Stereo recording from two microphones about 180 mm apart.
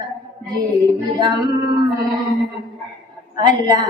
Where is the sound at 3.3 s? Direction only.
25° right (ahead or behind).